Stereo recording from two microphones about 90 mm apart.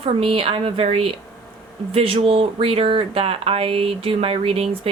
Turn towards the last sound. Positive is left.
turn(degrees=-90)